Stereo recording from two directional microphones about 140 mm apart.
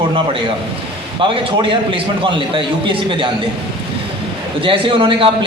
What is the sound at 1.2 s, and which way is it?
A man's voice, 40° right (ahead or behind).